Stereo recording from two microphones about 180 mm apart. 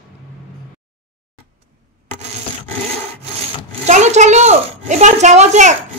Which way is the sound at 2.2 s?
35° right (ahead or behind).